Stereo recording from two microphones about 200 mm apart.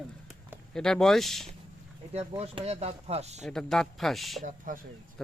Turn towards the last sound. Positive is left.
turn(degrees=0)  # may be behind; listen again after turning